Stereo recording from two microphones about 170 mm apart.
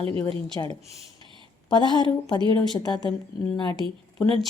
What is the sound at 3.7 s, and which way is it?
Speech, 30° right (ahead or behind).